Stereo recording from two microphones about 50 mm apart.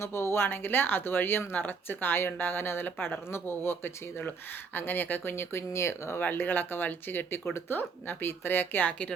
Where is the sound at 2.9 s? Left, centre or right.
Left.